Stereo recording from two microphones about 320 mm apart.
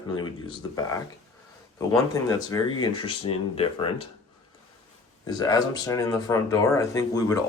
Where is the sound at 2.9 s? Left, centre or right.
Left.